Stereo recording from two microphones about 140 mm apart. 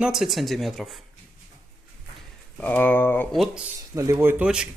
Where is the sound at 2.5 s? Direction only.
10° left (ahead or behind).